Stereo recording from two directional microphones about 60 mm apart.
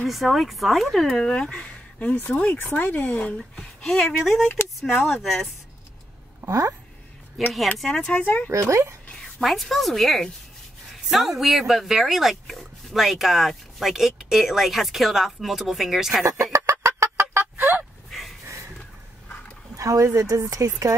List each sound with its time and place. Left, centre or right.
0.0 s speech: centre
1.1 s speech: centre
6.4 s speech: right
7.4 s speech: centre
7.8 s speech: centre
8.1 s speech: left
8.5 s speech: right
9.2 s speech: centre
16.5 s fowl: right
19.8 s speech: right